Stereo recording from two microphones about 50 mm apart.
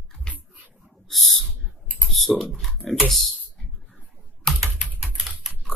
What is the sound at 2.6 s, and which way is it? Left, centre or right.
Speech, centre.